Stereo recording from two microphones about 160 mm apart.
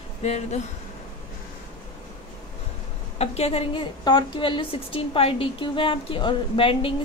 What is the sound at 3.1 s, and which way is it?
A woman's voice, 40° left (ahead or behind).